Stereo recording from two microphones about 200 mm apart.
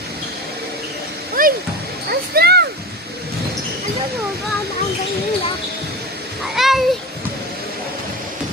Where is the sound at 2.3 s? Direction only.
55° right (ahead or behind).